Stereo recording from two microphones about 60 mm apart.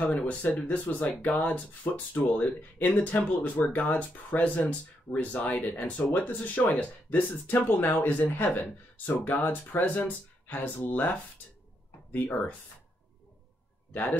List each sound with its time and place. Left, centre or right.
0.0 s speech: left
12.1 s speech: left